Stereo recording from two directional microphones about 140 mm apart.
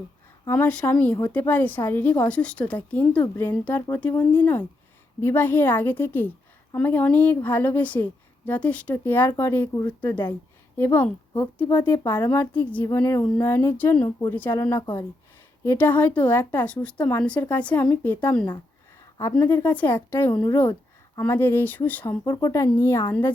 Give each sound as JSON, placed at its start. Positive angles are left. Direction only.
{"t": 0.4, "sound": "a woman's voice", "side_deg": 15}
{"t": 14.8, "sound": "speech", "side_deg": 35}
{"t": 15.6, "sound": "a woman's voice", "side_deg": 15}
{"t": 22.2, "sound": "speech", "side_deg": 25}